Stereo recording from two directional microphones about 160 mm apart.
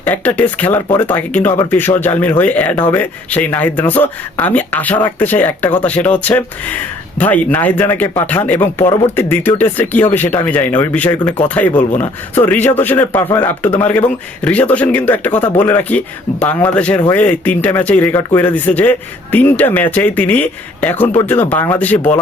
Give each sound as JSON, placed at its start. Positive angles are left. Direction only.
{"t": 0.0, "sound": "speech", "side_deg": 10}